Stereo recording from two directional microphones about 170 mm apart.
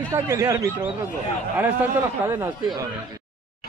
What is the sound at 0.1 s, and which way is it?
Speech, 15° right (ahead or behind).